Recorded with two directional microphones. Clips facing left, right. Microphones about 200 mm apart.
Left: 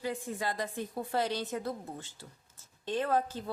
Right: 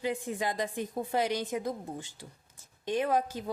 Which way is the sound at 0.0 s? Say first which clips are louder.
Right 3 dB; 20° right (ahead or behind).